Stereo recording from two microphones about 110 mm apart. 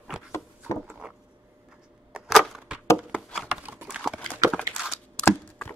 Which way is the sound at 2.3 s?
Centre (ahead or behind).